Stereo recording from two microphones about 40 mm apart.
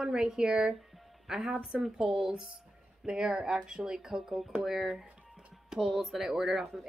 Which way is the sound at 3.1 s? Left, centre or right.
Centre.